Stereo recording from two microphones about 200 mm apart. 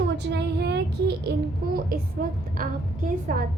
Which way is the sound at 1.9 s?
50° right (ahead or behind).